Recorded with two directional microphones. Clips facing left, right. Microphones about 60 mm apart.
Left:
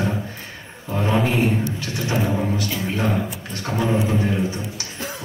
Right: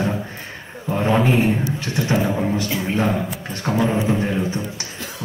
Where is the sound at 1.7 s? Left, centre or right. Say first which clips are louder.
Right 3 dB; right.